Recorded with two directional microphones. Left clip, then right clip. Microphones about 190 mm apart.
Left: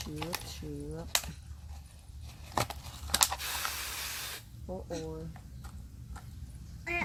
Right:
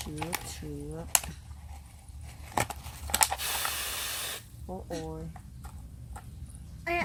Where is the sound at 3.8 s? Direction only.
45° right (ahead or behind).